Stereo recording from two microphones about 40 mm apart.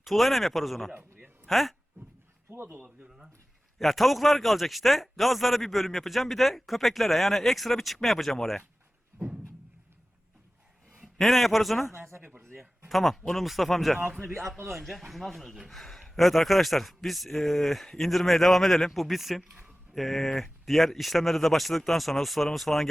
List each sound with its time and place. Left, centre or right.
0.0 s speech: centre
2.5 s speech: right
3.8 s speech: centre
11.0 s a man's voice: centre
12.4 s speech: right
12.9 s speech: centre